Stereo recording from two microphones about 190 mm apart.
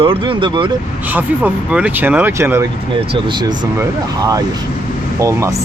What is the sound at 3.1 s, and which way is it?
Speech, 25° right (ahead or behind).